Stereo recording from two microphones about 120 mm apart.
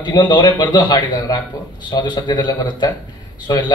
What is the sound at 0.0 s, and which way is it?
A man's voice, 40° left (ahead or behind).